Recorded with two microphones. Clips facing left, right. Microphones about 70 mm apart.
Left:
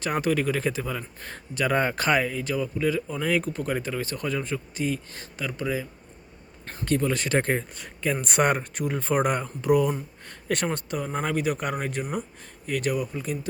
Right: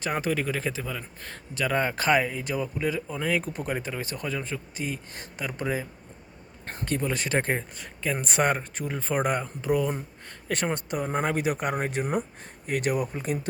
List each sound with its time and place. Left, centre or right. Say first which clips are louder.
0.0 s speech: left 3 dB; centre
2.2 s speech: left 2 dB; centre
5.1 s speech: left 1 dB; centre
5.5 s speech: even; right
6.8 s speech: left 4 dB; centre
10.7 s speech: right 1 dB; centre